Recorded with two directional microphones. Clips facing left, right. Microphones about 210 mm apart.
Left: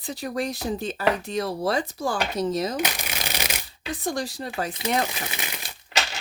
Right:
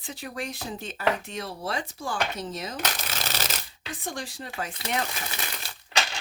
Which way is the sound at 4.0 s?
40° left (ahead or behind).